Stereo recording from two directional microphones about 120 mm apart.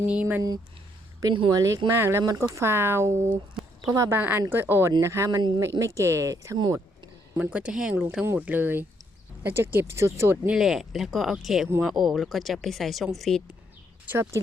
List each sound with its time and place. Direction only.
0.1 s speech: 15° right (ahead or behind)
1.5 s speech: 25° right (ahead or behind)
7.5 s speech: 5° right (ahead or behind); by 10.5 s 20° right (ahead or behind)
10.5 s speech: centre (ahead or behind)
14.1 s speech: 20° right (ahead or behind)